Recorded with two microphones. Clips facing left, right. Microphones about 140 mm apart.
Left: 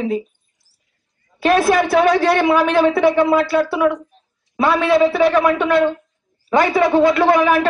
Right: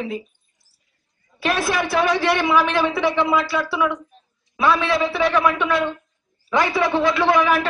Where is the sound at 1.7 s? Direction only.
45° left (ahead or behind).